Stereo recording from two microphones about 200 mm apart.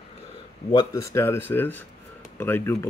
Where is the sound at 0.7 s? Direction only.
15° left (ahead or behind).